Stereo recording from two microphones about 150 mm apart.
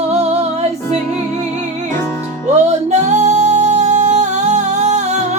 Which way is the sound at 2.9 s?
50° right (ahead or behind).